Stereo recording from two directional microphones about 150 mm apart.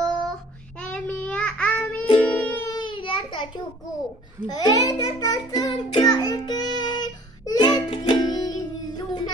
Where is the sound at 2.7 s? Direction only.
35° left (ahead or behind).